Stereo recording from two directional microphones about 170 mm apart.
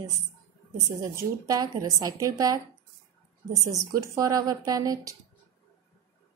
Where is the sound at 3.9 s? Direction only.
20° right (ahead or behind).